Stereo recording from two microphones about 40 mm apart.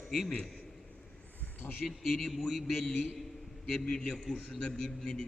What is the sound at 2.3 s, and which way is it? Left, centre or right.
Speech, centre.